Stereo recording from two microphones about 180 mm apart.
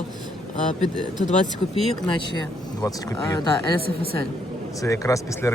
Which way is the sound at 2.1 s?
25° left (ahead or behind).